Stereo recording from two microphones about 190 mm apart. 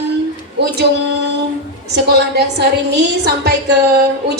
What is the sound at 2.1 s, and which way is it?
A woman's voice, 60° right (ahead or behind).